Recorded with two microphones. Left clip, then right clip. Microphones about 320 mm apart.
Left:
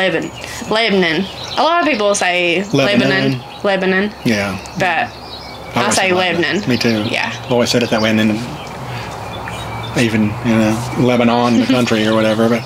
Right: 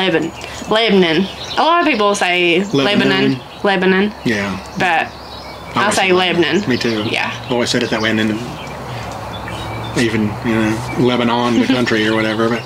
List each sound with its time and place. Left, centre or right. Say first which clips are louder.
0.7 s speech: right 1 dB; centre
4.2 s speech: left 1 dB; left
4.7 s speech: right 1 dB; centre
6.7 s speech: left 1 dB; left
9.9 s speech: left 1 dB; left